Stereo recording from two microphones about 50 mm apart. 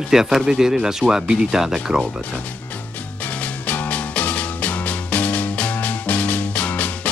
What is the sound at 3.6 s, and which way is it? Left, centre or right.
Music, left.